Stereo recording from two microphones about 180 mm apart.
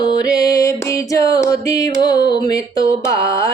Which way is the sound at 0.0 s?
20° left (ahead or behind).